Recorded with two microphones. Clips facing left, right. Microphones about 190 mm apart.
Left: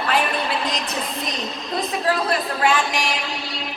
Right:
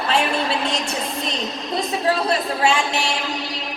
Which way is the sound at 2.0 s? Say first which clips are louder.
Right 2 dB; 25° right (ahead or behind).